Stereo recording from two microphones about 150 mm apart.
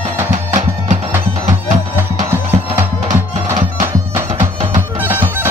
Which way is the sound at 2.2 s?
15° right (ahead or behind).